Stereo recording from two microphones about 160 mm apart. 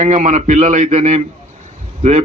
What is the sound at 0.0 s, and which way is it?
A man's voice, 50° right (ahead or behind).